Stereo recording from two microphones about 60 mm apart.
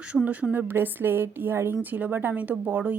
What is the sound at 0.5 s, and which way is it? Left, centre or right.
A woman's voice, right.